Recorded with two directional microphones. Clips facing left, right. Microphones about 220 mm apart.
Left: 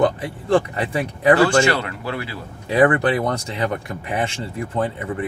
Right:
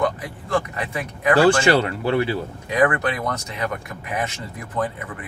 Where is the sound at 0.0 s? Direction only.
30° left (ahead or behind).